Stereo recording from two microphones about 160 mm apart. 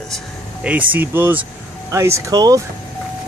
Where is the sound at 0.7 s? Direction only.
10° right (ahead or behind).